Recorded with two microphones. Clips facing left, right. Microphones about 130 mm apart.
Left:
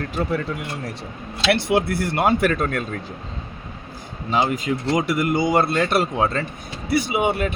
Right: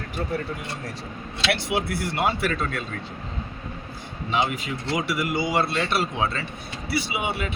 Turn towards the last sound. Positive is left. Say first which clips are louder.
# left 7 dB
turn(degrees=50)  # may be behind; listen again after turning